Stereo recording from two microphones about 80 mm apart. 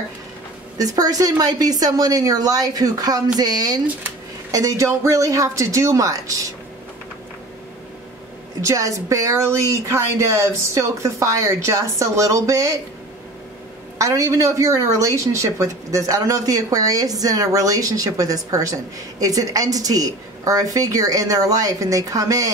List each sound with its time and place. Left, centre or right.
0.7 s a woman's voice: right
8.5 s a woman's voice: right
13.9 s a woman's voice: right